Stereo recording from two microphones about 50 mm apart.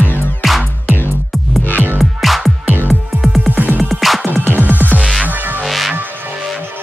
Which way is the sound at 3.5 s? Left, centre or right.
Right.